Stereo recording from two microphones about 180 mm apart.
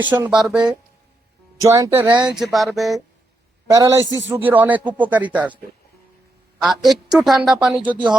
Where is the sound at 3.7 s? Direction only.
20° right (ahead or behind).